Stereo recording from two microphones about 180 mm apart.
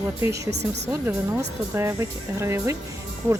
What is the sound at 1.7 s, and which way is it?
Speech, 15° right (ahead or behind).